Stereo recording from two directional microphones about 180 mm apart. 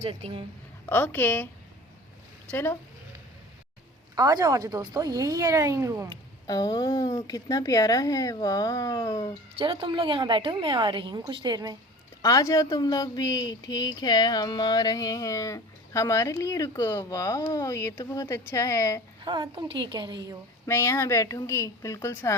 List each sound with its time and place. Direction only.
0.0 s a woman's voice: 35° right (ahead or behind)
0.9 s a woman's voice: 10° left (ahead or behind)
2.5 s a woman's voice: 10° left (ahead or behind)
4.1 s a woman's voice: 20° right (ahead or behind)
6.5 s speech: 20° left (ahead or behind)
9.6 s a woman's voice: 30° right (ahead or behind)
12.2 s speech: 20° left (ahead or behind)
19.2 s a woman's voice: 25° right (ahead or behind)
20.7 s a woman's voice: 15° left (ahead or behind)